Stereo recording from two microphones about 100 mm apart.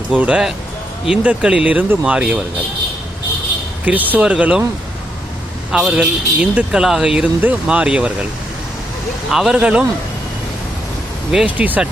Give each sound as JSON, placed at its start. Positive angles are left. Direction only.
{"t": 0.1, "sound": "speech", "side_deg": -10}
{"t": 3.8, "sound": "speech", "side_deg": -15}
{"t": 5.7, "sound": "speech", "side_deg": -10}
{"t": 9.3, "sound": "speech", "side_deg": -5}
{"t": 11.4, "sound": "speech", "side_deg": -15}